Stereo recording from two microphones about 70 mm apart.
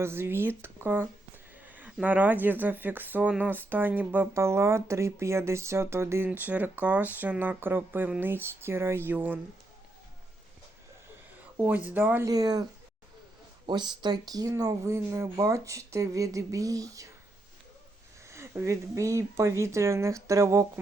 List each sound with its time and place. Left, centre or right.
0.0 s speech: right
1.6 s a sound: right
2.0 s speech: right
4.4 s speech: right
6.2 s speech: right
11.7 s speech: right
12.3 s speech: right
13.7 s speech: right
18.6 s speech: right